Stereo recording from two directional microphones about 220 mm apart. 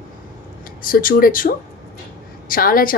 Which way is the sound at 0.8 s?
40° left (ahead or behind).